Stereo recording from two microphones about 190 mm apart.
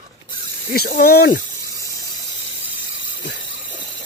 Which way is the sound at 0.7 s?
50° left (ahead or behind).